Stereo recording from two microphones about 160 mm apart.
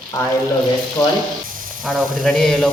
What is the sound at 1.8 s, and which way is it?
Speech, 5° left (ahead or behind).